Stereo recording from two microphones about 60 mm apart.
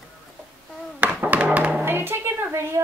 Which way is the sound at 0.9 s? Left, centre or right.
Right.